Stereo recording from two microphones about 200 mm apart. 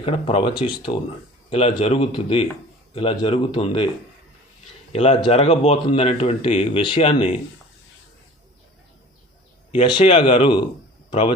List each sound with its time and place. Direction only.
0.0 s speech: 25° left (ahead or behind)
4.9 s speech: 35° left (ahead or behind)
9.7 s speech: 25° left (ahead or behind)